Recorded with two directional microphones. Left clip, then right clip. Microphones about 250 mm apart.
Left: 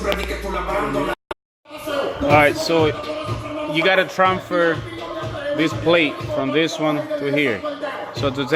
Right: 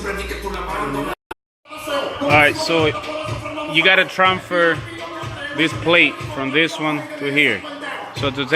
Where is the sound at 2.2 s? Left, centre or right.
Centre.